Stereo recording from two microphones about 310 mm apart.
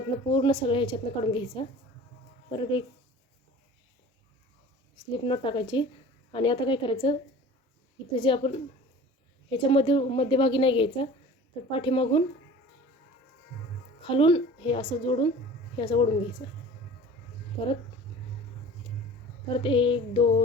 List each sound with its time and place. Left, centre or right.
0.3 s a woman's voice: centre
5.1 s a woman's voice: centre
14.0 s a woman's voice: centre
19.5 s a woman's voice: centre